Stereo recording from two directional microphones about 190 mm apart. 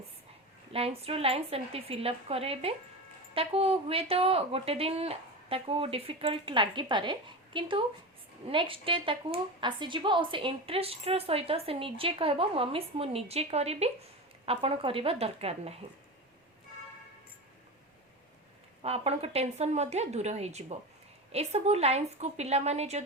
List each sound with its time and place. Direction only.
0.7 s a woman's voice: 30° right (ahead or behind)
18.8 s a woman's voice: 30° right (ahead or behind)